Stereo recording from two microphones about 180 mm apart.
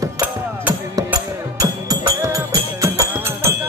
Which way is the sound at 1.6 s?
20° right (ahead or behind).